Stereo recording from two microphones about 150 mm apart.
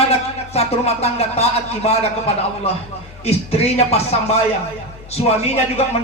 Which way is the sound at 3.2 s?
45° left (ahead or behind).